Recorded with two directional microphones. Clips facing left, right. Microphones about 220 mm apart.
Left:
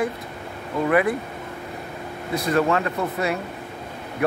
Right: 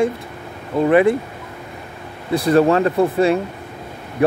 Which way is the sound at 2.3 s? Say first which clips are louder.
Right 7 dB; 35° right (ahead or behind).